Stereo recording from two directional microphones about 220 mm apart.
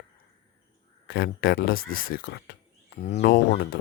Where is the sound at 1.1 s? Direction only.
45° left (ahead or behind).